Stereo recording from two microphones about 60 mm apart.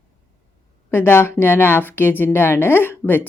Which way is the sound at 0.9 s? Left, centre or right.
Left.